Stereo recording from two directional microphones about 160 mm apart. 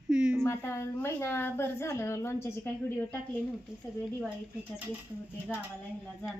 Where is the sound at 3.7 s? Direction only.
5° right (ahead or behind).